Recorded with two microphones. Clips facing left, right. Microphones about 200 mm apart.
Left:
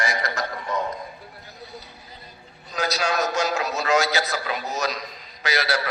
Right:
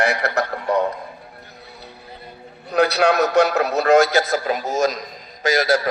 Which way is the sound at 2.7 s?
60° right (ahead or behind).